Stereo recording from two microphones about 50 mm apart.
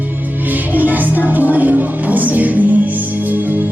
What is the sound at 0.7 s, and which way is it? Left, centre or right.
Music, right.